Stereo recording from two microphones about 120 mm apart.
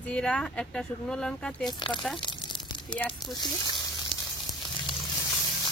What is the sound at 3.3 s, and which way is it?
Speech, 40° left (ahead or behind).